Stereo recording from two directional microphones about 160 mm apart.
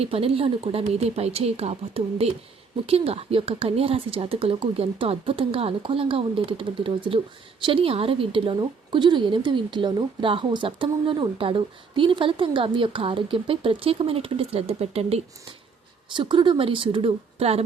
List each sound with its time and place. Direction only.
0.0 s a woman's voice: 35° right (ahead or behind)